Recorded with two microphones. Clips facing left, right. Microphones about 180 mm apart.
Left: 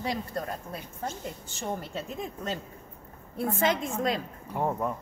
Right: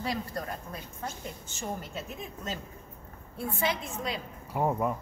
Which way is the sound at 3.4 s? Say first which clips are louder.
Left 4 dB; 45° left (ahead or behind).